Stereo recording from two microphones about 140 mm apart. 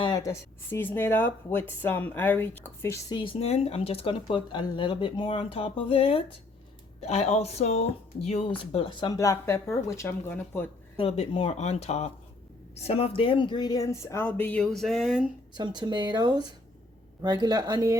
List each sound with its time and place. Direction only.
0.0 s speech: 25° left (ahead or behind)
3.1 s speech: 35° left (ahead or behind); by 10.7 s 15° left (ahead or behind)
10.9 s speech: 45° left (ahead or behind); by 15.3 s 5° right (ahead or behind)
15.5 s speech: 30° right (ahead or behind)